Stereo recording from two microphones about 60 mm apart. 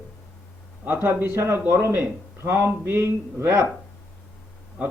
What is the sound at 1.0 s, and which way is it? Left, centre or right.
A man's voice, right.